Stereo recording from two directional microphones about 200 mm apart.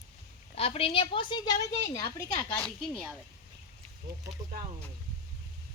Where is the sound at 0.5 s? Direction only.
30° left (ahead or behind); by 2.7 s 10° left (ahead or behind).